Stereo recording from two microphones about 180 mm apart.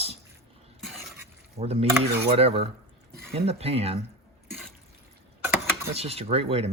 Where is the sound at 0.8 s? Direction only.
Centre (ahead or behind).